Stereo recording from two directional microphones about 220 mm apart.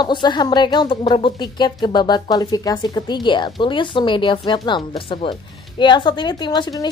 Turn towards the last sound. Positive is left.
turn(degrees=20)  # may be behind; listen again after turning